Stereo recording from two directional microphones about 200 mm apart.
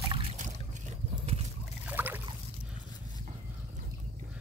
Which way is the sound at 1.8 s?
10° right (ahead or behind).